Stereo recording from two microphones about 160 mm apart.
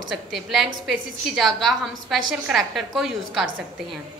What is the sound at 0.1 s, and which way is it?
A woman's voice, centre (ahead or behind).